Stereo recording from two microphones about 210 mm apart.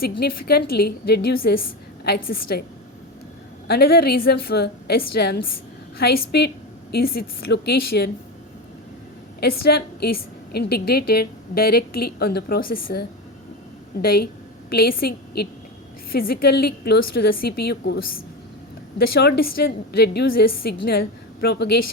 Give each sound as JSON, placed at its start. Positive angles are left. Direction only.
{"t": 0.0, "sound": "a woman's voice", "side_deg": 45}
{"t": 3.7, "sound": "a woman's voice", "side_deg": 45}
{"t": 9.4, "sound": "a woman's voice", "side_deg": 50}